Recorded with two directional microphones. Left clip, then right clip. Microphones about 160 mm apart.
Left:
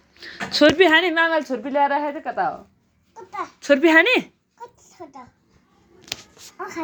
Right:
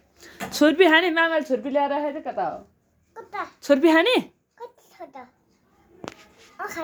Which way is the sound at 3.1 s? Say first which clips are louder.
Left 1 dB; 5° right (ahead or behind).